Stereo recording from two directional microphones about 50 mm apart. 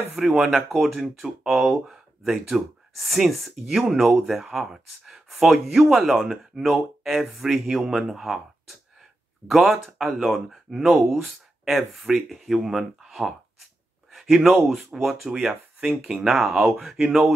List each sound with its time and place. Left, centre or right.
0.1 s speech: centre
14.1 s a sound: centre
15.0 s speech: centre
15.3 s speech: centre